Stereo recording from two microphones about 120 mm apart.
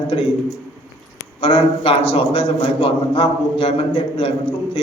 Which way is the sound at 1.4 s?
50° left (ahead or behind).